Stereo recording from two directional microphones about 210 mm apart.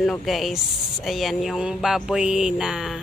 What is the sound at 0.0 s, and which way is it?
Speech, centre (ahead or behind).